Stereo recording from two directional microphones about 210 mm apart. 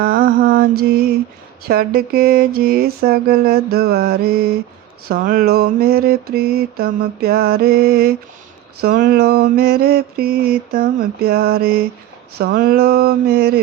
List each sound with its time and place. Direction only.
0.0 s mantra: 45° right (ahead or behind)